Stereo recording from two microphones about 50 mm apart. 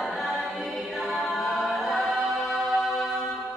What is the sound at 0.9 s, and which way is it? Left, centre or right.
A capella, centre.